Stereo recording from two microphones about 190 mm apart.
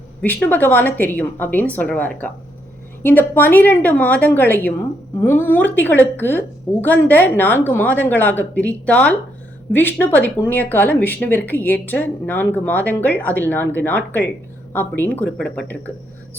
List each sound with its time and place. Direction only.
0.2 s a woman's voice: 10° left (ahead or behind)